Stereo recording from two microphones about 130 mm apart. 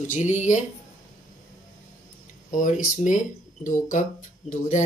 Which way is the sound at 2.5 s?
80° left.